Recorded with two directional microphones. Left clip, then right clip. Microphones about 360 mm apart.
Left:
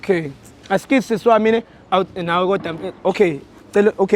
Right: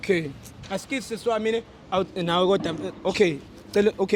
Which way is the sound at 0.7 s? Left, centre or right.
Left.